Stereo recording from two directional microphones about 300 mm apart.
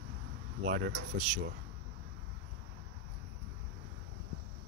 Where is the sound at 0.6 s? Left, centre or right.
Right.